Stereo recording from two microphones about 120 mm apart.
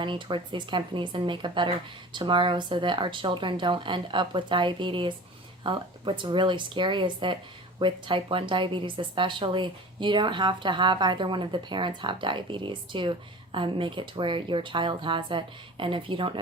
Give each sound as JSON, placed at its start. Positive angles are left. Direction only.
{"t": 0.0, "sound": "a woman's voice", "side_deg": -40}